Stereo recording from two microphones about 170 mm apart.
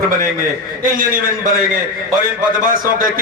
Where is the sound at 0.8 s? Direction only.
55° right (ahead or behind).